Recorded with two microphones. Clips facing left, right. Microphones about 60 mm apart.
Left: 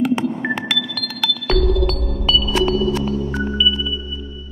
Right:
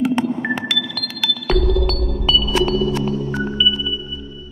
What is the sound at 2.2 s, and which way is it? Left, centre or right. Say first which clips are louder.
Sonar: even; centre.